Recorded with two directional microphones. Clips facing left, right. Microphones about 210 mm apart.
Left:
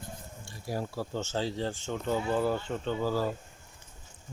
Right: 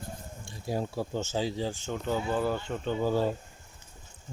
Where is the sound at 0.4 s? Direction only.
20° right (ahead or behind).